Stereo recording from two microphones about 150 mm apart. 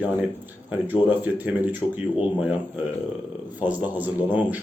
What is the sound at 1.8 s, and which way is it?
Speech, 35° left (ahead or behind).